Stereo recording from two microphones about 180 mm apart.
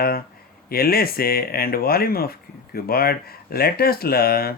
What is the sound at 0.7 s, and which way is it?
Speech, 55° left (ahead or behind).